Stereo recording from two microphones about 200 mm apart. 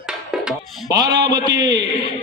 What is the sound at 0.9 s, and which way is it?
Speech, 20° right (ahead or behind).